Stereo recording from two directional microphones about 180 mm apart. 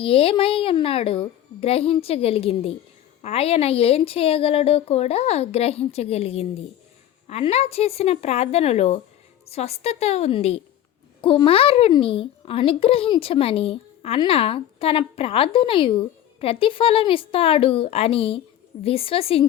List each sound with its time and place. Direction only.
0.0 s a child's voice: 30° left (ahead or behind)